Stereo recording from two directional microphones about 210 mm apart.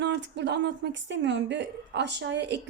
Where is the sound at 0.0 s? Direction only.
55° right (ahead or behind).